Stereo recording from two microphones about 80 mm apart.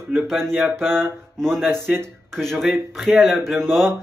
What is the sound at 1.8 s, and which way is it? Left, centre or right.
Speech, right.